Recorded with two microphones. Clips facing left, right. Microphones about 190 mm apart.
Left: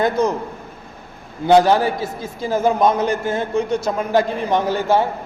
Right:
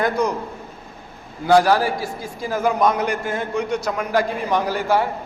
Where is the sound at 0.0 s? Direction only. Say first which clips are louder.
Left 3 dB; 25° left (ahead or behind).